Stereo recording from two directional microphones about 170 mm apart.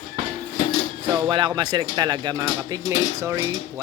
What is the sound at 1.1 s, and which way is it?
Speech, 25° right (ahead or behind).